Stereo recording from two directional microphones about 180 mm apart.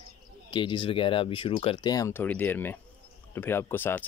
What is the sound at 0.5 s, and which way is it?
Speech, 25° left (ahead or behind).